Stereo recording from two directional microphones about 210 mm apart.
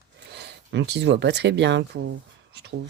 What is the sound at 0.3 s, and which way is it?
Speech, 55° right (ahead or behind).